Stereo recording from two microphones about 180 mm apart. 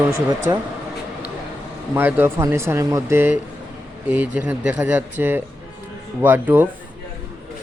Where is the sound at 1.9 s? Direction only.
10° right (ahead or behind).